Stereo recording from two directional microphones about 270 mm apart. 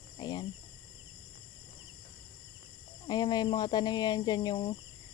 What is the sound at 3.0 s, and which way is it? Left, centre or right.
Speech, centre.